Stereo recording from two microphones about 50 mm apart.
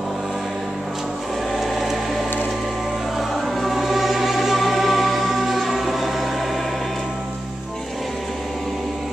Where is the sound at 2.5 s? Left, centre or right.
Centre.